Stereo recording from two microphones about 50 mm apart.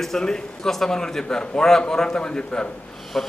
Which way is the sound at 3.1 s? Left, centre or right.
Centre.